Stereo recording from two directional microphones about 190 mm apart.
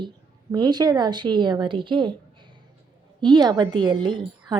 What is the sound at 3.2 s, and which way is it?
A woman's voice, 25° right (ahead or behind).